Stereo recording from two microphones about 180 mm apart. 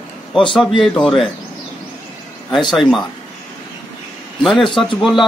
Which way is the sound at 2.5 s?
25° left (ahead or behind).